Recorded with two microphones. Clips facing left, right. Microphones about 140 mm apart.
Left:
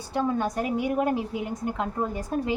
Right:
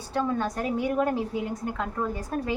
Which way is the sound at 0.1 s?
15° left (ahead or behind).